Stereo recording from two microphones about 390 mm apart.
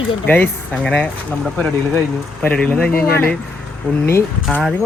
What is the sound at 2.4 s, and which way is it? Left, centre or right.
Speech, centre.